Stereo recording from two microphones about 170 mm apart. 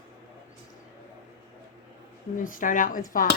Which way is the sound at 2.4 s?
50° left (ahead or behind).